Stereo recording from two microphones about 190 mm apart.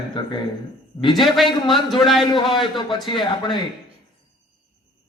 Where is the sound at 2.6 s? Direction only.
25° left (ahead or behind).